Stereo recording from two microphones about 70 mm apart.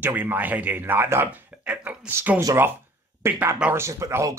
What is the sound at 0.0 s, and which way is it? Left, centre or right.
Speech, right.